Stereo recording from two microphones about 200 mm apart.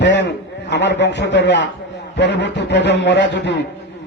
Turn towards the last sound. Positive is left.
turn(degrees=60)  # may be behind; listen again after turning